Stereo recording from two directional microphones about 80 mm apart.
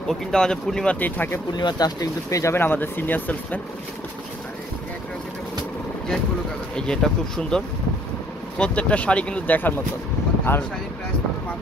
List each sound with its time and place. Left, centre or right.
0.1 s speech: centre
0.9 s speech: left
1.5 s speech: left
2.5 s speech: left
6.7 s speech: centre; by 10.6 s left